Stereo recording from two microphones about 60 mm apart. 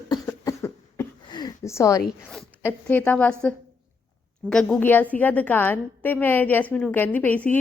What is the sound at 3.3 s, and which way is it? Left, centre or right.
A woman's voice, centre.